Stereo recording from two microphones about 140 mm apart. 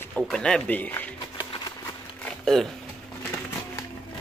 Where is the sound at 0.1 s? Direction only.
5° left (ahead or behind).